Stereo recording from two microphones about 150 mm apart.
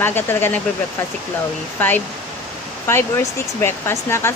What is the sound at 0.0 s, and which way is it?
Speech, 15° left (ahead or behind).